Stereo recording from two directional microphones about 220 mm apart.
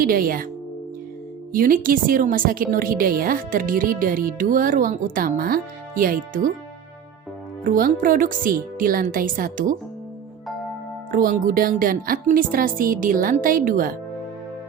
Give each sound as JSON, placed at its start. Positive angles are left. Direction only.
{"t": 0.0, "sound": "a woman's voice", "side_deg": -40}
{"t": 1.5, "sound": "a woman's voice", "side_deg": -40}
{"t": 7.6, "sound": "a woman's voice", "side_deg": -40}
{"t": 11.1, "sound": "a woman's voice", "side_deg": -40}